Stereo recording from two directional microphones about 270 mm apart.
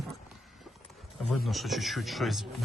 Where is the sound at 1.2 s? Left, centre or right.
Centre.